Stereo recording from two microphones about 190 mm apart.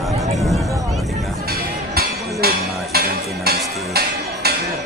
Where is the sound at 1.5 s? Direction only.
55° right (ahead or behind).